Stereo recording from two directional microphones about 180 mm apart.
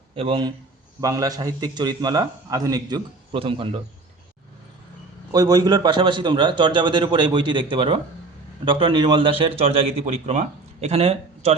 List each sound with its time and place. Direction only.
0.2 s a man's voice: 30° right (ahead or behind)
5.3 s a man's voice: 20° right (ahead or behind); by 11.5 s 35° right (ahead or behind)